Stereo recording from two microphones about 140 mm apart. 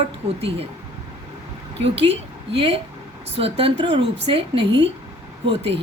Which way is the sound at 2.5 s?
45° right (ahead or behind).